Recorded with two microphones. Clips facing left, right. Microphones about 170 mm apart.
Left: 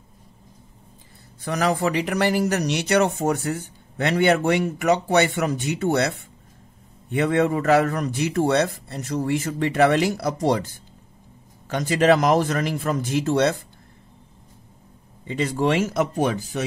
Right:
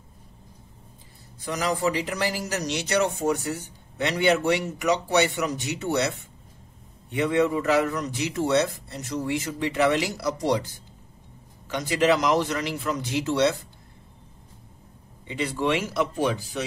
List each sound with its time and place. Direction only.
1.4 s speech: 60° left (ahead or behind)
15.4 s speech: 45° left (ahead or behind)